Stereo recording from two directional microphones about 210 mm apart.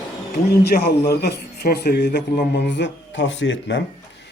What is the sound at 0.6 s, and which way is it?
Speech, 45° left (ahead or behind).